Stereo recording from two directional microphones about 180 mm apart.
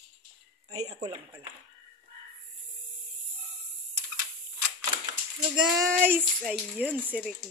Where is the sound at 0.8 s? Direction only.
35° right (ahead or behind).